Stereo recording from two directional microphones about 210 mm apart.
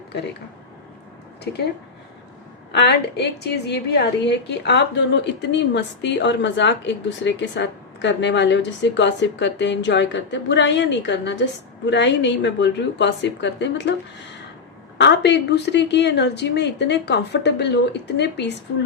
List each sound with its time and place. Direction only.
2.7 s a woman's voice: 50° left (ahead or behind)
14.9 s a woman's voice: 55° left (ahead or behind)